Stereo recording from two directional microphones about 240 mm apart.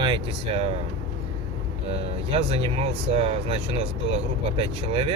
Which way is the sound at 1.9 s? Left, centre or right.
Right.